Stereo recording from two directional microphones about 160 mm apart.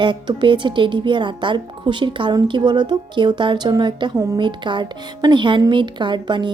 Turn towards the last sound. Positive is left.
turn(degrees=-30)  # may be behind; listen again after turning